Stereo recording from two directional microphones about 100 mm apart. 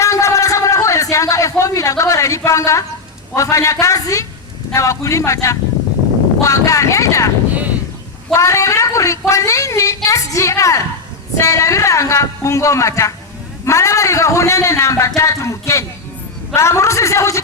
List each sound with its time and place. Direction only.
0.0 s a sound: 30° left (ahead or behind)
1.1 s a woman's voice: 35° left (ahead or behind)
8.3 s a woman's voice: 30° left (ahead or behind)